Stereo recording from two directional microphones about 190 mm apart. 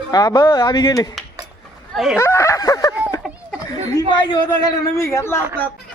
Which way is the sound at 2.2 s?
15° left (ahead or behind).